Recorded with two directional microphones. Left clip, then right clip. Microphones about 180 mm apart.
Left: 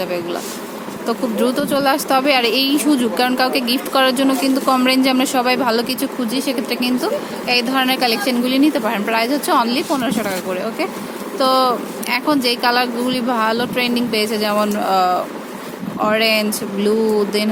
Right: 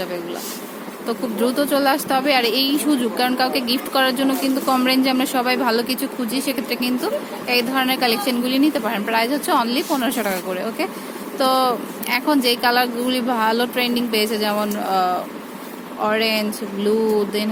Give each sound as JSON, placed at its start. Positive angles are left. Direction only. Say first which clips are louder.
{"t": 1.0, "sound": "a woman's voice", "louder": "left 3 dB", "side_deg": 10}